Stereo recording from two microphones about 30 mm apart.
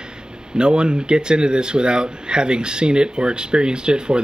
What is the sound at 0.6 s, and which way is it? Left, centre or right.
Speech, right.